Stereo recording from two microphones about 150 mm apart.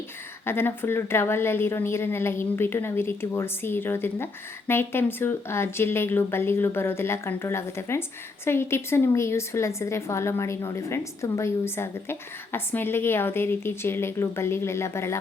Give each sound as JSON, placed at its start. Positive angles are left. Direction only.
{"t": 0.4, "sound": "a woman's voice", "side_deg": 15}